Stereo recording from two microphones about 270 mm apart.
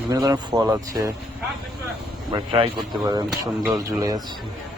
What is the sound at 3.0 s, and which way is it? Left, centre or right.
A man's voice, centre.